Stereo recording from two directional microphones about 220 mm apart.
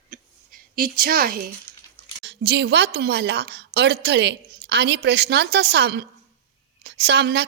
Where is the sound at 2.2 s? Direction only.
50° right (ahead or behind).